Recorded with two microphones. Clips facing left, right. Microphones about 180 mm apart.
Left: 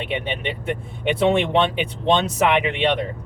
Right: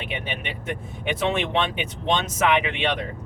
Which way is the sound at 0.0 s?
30° left (ahead or behind).